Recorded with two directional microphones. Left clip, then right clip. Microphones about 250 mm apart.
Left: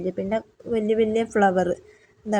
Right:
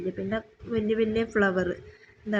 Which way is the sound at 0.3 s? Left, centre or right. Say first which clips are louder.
Left 6 dB; centre.